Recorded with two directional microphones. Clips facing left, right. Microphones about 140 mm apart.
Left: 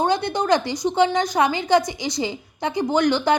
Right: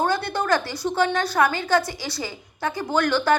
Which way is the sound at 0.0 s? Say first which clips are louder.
Left 2 dB; 20° left (ahead or behind).